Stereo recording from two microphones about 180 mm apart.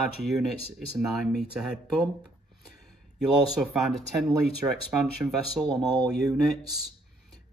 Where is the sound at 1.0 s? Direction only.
5° right (ahead or behind).